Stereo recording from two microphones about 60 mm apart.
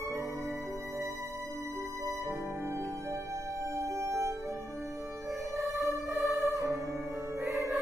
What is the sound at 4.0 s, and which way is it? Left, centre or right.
Music, right.